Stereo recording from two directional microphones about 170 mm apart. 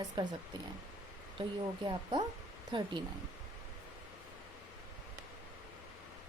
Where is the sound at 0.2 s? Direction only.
25° right (ahead or behind).